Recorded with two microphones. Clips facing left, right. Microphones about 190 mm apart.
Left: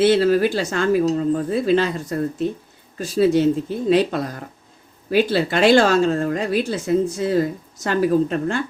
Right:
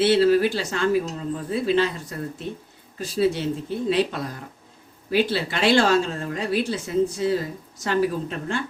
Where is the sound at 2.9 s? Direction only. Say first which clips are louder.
Left 6 dB; 45° left (ahead or behind).